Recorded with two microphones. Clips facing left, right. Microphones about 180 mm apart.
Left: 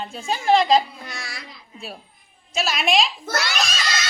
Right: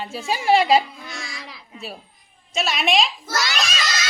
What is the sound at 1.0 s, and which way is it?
Child singing, 65° left (ahead or behind).